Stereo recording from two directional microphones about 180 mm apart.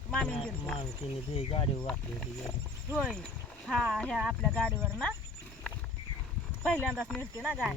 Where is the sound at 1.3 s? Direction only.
30° left (ahead or behind).